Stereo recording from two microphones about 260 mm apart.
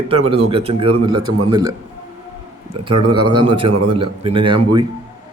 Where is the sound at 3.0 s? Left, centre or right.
Centre.